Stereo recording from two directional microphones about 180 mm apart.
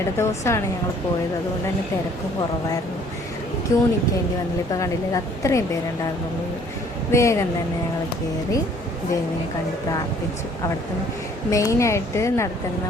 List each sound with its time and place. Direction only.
0.2 s a woman's voice: 15° left (ahead or behind)
3.7 s a woman's voice: 15° left (ahead or behind)
7.1 s a woman's voice: 15° left (ahead or behind)
11.5 s a woman's voice: 15° left (ahead or behind)